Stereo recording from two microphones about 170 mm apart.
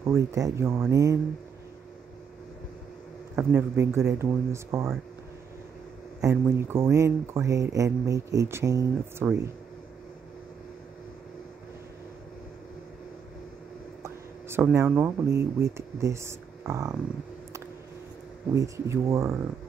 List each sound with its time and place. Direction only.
0.0 s speech: 15° right (ahead or behind)
3.3 s speech: 15° right (ahead or behind)
6.3 s speech: 15° right (ahead or behind)
14.0 s speech: 15° right (ahead or behind)
18.5 s speech: 15° right (ahead or behind)